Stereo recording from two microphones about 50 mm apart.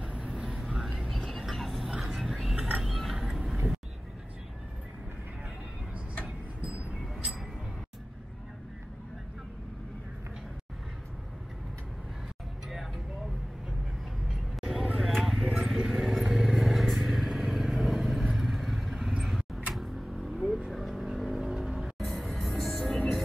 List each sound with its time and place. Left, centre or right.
0.0 s vehicle: right
0.6 s vehicle: centre
1.4 s a sound: centre
3.2 s cat: centre
14.6 s vehicle: centre
15.4 s vehicle: centre
19.7 s a sound: centre
20.7 s vehicle: centre
21.9 s music: centre